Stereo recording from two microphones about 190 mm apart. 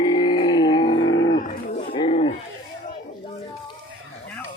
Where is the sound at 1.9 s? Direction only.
30° left (ahead or behind).